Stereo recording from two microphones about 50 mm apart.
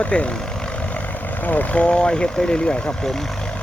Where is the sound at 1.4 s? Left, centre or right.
Left; by 2.9 s centre.